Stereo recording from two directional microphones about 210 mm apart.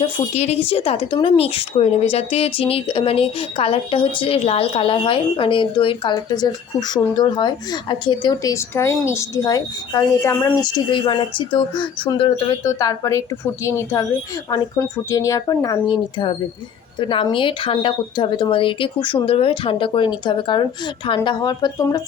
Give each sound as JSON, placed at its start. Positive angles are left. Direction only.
{"t": 0.0, "sound": "speech", "side_deg": 30}